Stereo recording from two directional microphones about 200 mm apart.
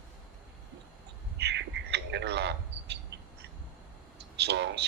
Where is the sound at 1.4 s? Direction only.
60° right (ahead or behind).